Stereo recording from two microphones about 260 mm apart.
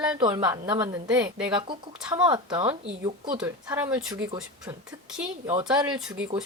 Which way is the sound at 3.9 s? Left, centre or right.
Centre.